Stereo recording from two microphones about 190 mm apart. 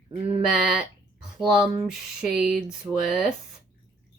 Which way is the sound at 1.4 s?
Centre (ahead or behind).